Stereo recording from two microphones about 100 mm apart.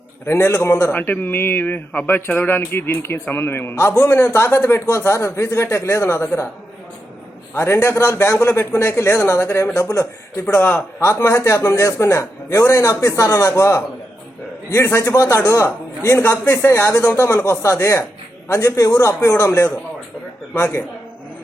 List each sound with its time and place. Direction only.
0.3 s a man's voice: 25° left (ahead or behind)
7.5 s a man's voice: 25° left (ahead or behind)